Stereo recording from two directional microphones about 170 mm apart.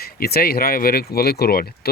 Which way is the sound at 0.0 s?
65° left (ahead or behind).